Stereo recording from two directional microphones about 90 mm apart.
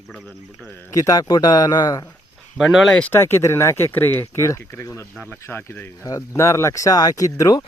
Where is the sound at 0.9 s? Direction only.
40° left (ahead or behind).